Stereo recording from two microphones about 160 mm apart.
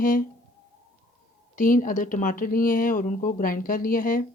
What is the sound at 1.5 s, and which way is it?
Speech, 60° left (ahead or behind).